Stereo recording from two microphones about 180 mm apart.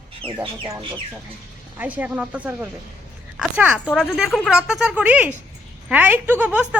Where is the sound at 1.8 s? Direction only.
10° right (ahead or behind).